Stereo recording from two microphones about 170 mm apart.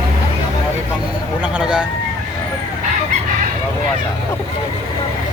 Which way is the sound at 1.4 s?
5° right (ahead or behind).